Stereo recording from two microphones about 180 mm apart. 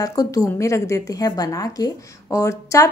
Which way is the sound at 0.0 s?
20° left (ahead or behind).